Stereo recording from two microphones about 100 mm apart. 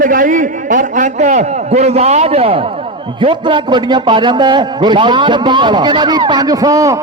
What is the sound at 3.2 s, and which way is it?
A man's voice, 55° right (ahead or behind).